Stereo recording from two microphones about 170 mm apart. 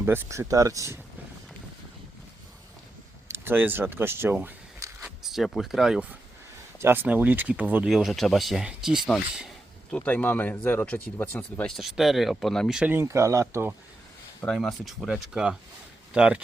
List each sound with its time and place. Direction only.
0.0 s speech: 15° right (ahead or behind)
3.2 s speech: 15° right (ahead or behind)
5.0 s speech: centre (ahead or behind)
9.9 s speech: 10° left (ahead or behind)
11.8 s speech: centre (ahead or behind)
14.4 s speech: 5° left (ahead or behind)